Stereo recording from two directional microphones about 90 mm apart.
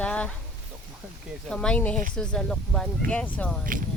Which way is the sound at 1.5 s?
10° left (ahead or behind).